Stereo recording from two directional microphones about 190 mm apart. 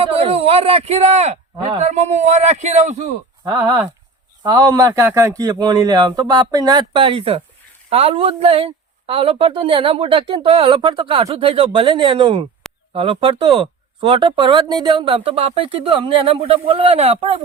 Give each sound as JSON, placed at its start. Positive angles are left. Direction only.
{"t": 0.0, "sound": "speech", "side_deg": -30}
{"t": 1.5, "sound": "speech", "side_deg": -25}
{"t": 1.8, "sound": "speech", "side_deg": -35}
{"t": 3.4, "sound": "speech", "side_deg": -20}